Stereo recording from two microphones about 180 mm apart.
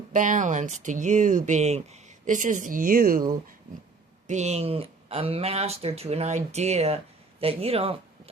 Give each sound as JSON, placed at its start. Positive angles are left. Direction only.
{"t": 0.1, "sound": "speech", "side_deg": -45}
{"t": 4.3, "sound": "speech", "side_deg": -40}